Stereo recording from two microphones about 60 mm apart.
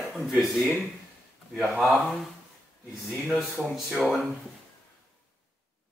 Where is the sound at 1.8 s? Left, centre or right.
Centre.